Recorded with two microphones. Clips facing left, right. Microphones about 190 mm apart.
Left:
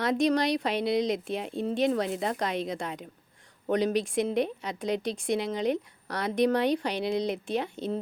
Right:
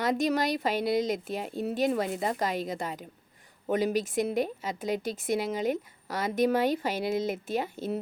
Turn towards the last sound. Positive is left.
turn(degrees=-5)  # may be behind; listen again after turning